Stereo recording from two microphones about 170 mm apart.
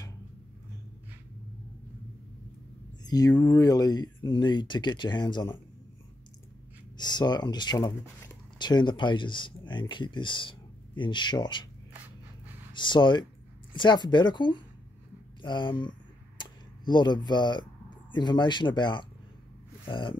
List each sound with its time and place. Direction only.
3.0 s speech: 20° left (ahead or behind)
7.0 s speech: 25° left (ahead or behind)
12.7 s speech: 25° left (ahead or behind)
15.4 s a sound: 30° left (ahead or behind)
18.1 s speech: 25° left (ahead or behind)